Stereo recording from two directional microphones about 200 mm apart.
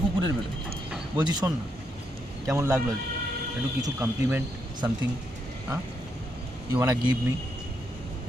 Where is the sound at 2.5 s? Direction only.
15° right (ahead or behind).